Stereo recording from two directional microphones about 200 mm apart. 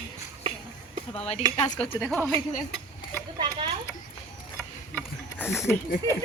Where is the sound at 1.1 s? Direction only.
30° left (ahead or behind).